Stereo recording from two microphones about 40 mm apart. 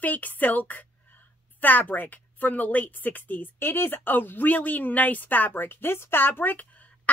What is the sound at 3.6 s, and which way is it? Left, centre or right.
Speech, left.